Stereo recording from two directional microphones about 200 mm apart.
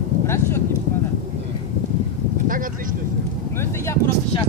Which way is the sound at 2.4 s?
45° right (ahead or behind).